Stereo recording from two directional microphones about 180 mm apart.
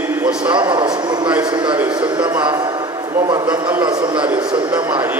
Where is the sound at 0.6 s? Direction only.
25° right (ahead or behind).